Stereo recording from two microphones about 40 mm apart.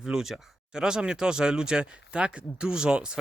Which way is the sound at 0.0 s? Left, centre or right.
Centre.